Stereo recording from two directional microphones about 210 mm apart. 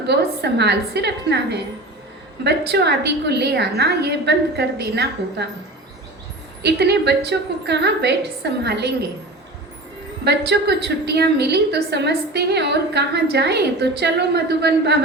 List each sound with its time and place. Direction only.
0.1 s a woman's voice: 55° right (ahead or behind)
6.6 s a woman's voice: 50° right (ahead or behind)
10.2 s a woman's voice: 50° right (ahead or behind)